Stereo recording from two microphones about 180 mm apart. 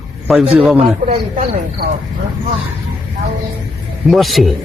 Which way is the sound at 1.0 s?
50° right (ahead or behind).